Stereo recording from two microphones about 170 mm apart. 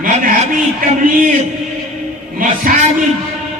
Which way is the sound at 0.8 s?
55° right (ahead or behind).